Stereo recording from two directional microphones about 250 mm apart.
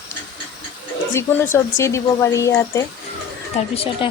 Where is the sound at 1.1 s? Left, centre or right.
Centre.